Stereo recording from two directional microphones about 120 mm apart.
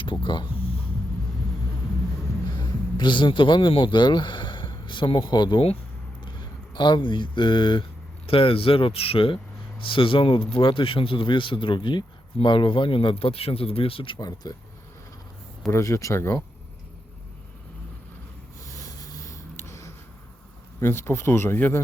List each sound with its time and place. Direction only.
0.0 s speech: 40° left (ahead or behind)
2.5 s speech: 40° left (ahead or behind)
6.7 s speech: 40° left (ahead or behind)
15.7 s speech: 25° left (ahead or behind)
18.7 s snort: 30° left (ahead or behind)
20.8 s speech: 20° left (ahead or behind)